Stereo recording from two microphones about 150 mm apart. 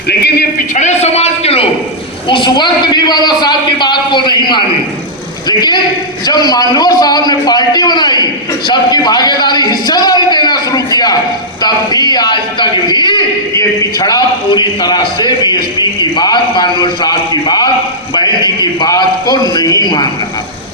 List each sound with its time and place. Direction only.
0.1 s a man's voice: 90° left
0.8 s a sound: 50° left (ahead or behind)
2.3 s a man's voice: 30° left (ahead or behind)